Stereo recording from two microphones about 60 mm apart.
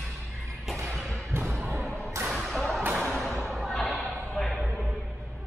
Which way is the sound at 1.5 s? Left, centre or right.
Right.